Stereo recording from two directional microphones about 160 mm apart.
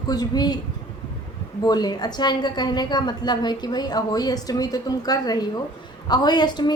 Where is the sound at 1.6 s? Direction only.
25° left (ahead or behind).